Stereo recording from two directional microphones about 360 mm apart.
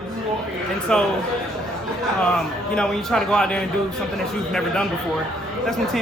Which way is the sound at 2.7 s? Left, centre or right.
Centre.